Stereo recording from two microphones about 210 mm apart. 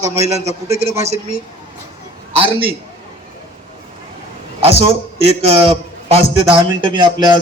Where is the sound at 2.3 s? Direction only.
25° right (ahead or behind).